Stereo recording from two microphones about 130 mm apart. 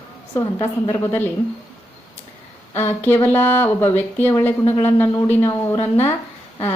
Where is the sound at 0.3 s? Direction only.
20° left (ahead or behind).